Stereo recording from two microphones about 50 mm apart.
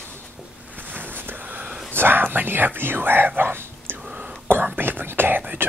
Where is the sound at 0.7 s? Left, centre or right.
Right.